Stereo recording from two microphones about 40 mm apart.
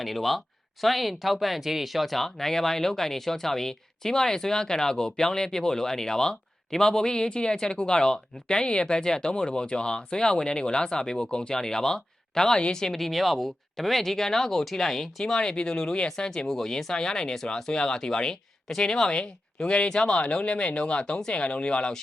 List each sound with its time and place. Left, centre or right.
0.0 s speech: centre
12.5 s speech: left
12.8 s speech: centre
15.3 s speech: centre